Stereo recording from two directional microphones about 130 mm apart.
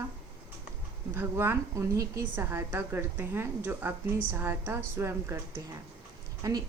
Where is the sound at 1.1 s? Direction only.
15° right (ahead or behind).